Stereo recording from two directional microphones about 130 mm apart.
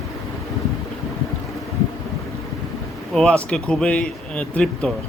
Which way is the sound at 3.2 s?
5° left (ahead or behind).